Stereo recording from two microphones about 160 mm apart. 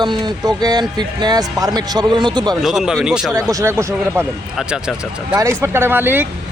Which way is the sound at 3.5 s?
15° right (ahead or behind).